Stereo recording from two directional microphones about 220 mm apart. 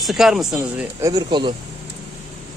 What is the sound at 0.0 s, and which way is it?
Speech, centre (ahead or behind).